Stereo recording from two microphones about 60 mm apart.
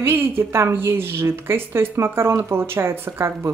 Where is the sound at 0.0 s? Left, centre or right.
Right.